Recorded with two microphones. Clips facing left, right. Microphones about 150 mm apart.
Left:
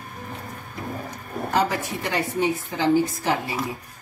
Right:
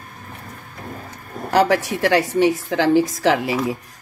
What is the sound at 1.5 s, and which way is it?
A woman's voice, 75° right (ahead or behind).